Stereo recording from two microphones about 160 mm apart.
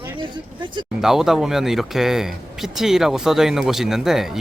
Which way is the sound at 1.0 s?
Centre (ahead or behind).